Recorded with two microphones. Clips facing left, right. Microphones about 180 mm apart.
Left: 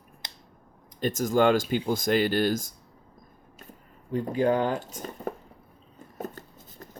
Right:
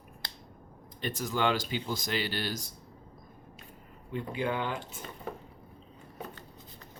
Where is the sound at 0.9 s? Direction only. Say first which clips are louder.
Left 9 dB; 45° left (ahead or behind).